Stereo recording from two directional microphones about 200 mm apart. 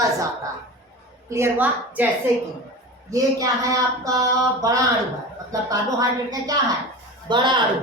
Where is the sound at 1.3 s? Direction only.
10° right (ahead or behind).